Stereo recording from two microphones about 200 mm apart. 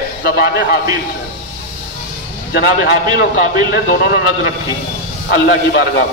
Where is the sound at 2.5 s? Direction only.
50° left (ahead or behind).